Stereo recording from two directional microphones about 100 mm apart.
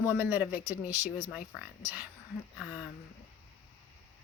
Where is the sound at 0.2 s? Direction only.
20° right (ahead or behind).